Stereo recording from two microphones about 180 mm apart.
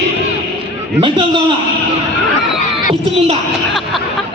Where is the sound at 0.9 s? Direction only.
25° right (ahead or behind).